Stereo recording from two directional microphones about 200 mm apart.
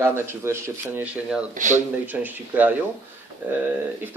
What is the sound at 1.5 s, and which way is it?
Speech, 40° right (ahead or behind).